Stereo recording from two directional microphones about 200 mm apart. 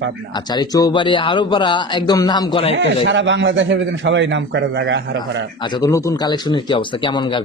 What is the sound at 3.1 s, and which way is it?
A man's voice, 65° right (ahead or behind).